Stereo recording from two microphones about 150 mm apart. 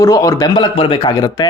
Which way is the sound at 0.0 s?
20° left (ahead or behind).